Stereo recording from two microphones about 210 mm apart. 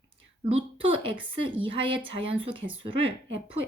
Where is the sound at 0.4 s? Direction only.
25° right (ahead or behind).